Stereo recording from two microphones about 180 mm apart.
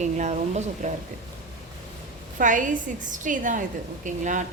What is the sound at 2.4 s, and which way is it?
A woman's voice, 45° right (ahead or behind).